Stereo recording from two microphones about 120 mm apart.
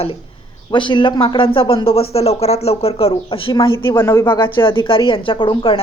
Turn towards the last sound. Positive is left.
turn(degrees=45)  # may be behind; listen again after turning